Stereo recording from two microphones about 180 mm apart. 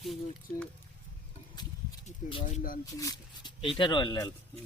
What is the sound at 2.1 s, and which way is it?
Speech, 40° left (ahead or behind).